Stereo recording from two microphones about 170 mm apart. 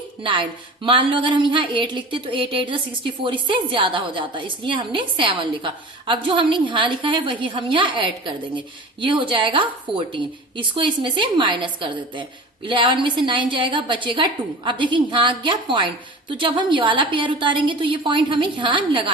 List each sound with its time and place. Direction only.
0.2 s a woman's voice: 30° right (ahead or behind)